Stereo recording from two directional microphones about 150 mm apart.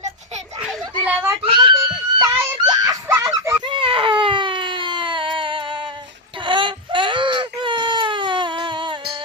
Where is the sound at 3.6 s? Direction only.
35° right (ahead or behind).